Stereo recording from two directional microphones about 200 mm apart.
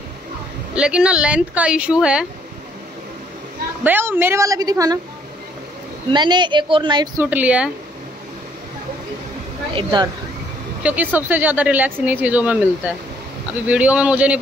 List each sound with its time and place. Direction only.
0.7 s speech: 5° right (ahead or behind)
3.8 s speech: 10° right (ahead or behind)
6.1 s a woman's voice: 20° right (ahead or behind)
7.2 s speech: 5° right (ahead or behind)
9.8 s a woman's voice: 25° right (ahead or behind)
10.8 s speech: 10° right (ahead or behind)